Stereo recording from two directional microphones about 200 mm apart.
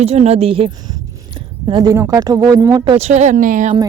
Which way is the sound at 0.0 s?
30° right (ahead or behind).